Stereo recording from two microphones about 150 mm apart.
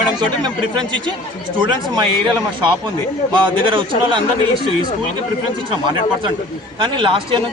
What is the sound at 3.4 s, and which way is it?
Speech, 35° right (ahead or behind).